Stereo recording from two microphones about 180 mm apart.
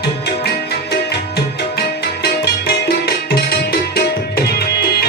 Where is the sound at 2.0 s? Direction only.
65° left (ahead or behind).